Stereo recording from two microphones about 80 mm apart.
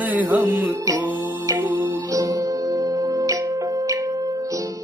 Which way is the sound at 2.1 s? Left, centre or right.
Right.